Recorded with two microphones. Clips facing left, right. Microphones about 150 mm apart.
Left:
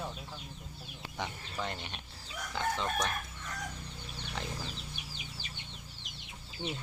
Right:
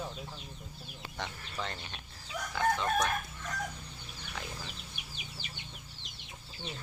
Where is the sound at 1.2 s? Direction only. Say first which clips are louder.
Left 1 dB; 15° left (ahead or behind).